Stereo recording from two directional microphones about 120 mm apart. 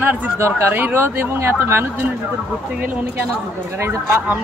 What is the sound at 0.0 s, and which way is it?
Speech, 15° right (ahead or behind).